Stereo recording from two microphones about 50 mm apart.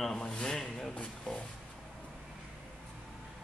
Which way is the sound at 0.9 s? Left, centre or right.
Left.